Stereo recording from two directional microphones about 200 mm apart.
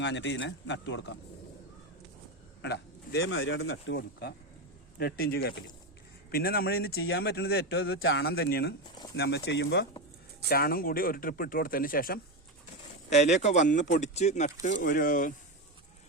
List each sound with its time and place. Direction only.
0.0 s speech: 60° left (ahead or behind)
2.6 s speech: 55° left (ahead or behind)
10.5 s speech: 50° left (ahead or behind)
13.1 s speech: 35° left (ahead or behind)